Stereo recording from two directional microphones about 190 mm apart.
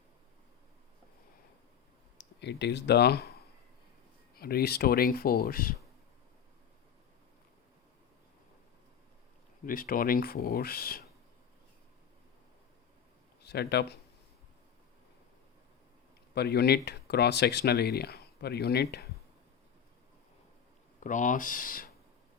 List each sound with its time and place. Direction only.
2.1 s speech: 65° left (ahead or behind)
9.6 s speech: 50° left (ahead or behind)
13.4 s speech: 60° left (ahead or behind)
16.3 s speech: 60° left (ahead or behind)
21.0 s speech: 40° left (ahead or behind)